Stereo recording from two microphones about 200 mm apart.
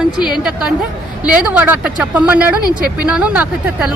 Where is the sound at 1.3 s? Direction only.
5° right (ahead or behind).